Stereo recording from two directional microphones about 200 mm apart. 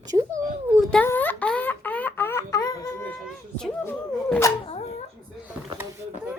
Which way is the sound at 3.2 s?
Centre (ahead or behind).